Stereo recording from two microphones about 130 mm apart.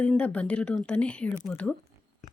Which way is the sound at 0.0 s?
10° left (ahead or behind).